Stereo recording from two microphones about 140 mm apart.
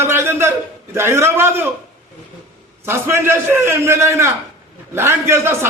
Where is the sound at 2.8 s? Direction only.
20° right (ahead or behind).